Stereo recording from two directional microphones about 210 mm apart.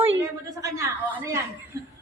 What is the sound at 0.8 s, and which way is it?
Speech, 15° right (ahead or behind).